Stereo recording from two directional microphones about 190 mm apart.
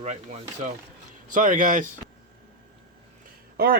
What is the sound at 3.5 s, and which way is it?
Speech, 50° right (ahead or behind).